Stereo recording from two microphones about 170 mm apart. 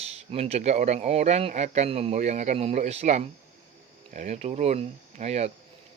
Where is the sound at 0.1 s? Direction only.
40° right (ahead or behind).